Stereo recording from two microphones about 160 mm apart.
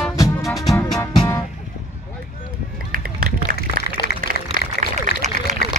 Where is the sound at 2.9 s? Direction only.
65° right (ahead or behind).